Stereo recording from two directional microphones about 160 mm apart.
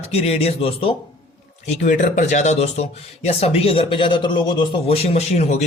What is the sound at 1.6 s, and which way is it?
Speech, 50° left (ahead or behind).